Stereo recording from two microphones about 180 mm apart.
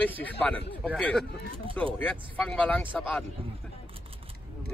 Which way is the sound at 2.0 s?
5° left (ahead or behind).